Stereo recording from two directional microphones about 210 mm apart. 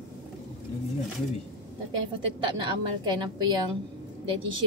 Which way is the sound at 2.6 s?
20° right (ahead or behind).